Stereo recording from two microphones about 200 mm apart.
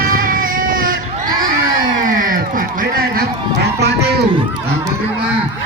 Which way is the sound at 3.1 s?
50° right (ahead or behind).